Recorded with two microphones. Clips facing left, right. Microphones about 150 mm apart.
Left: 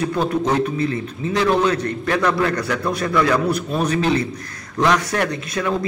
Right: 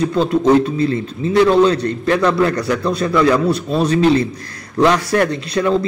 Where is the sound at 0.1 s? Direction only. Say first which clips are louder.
Right 6 dB; 25° right (ahead or behind).